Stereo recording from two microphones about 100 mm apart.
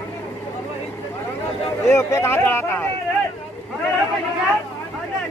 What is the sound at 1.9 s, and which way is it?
Speech, 30° left (ahead or behind).